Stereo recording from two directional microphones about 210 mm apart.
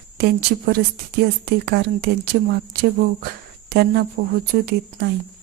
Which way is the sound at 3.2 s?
50° right (ahead or behind).